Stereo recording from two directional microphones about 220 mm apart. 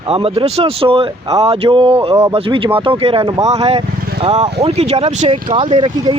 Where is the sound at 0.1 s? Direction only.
25° right (ahead or behind).